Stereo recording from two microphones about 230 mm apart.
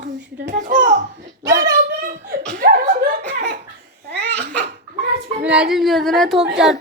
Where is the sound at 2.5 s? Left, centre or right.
Right.